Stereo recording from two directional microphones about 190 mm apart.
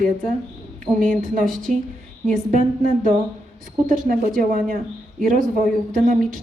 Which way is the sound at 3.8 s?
45° right (ahead or behind).